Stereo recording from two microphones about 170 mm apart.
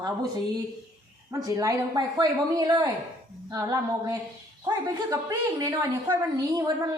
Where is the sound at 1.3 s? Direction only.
20° right (ahead or behind).